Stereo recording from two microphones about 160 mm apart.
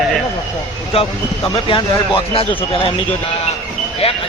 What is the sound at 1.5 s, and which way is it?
A man's voice, 35° left (ahead or behind).